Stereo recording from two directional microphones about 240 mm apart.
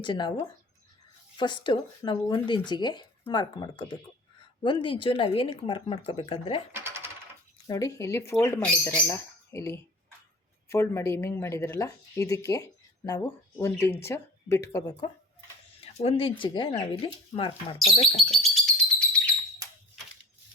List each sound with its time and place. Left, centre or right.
0.0 s speech: centre
6.7 s coin: centre
7.7 s speech: centre
15.8 s speech: left
18.5 s bird: centre